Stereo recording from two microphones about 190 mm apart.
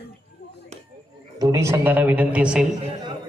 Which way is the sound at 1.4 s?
15° right (ahead or behind).